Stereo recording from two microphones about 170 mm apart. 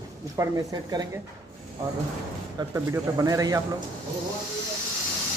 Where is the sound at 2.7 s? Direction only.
20° right (ahead or behind).